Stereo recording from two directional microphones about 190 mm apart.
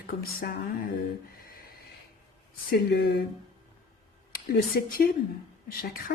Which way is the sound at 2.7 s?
55° left (ahead or behind).